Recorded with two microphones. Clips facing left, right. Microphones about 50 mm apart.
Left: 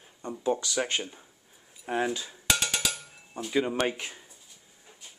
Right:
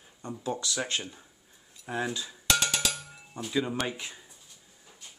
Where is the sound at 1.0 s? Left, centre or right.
Centre.